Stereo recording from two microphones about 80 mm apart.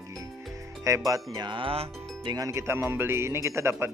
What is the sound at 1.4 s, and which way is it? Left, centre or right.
Speech, right.